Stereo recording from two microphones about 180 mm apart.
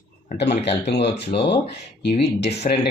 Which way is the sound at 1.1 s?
70° left (ahead or behind).